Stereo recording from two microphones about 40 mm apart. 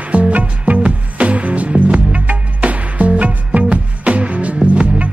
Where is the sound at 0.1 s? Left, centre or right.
Right.